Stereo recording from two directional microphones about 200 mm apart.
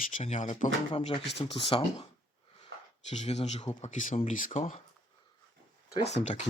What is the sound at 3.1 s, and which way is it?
Speech, 35° left (ahead or behind).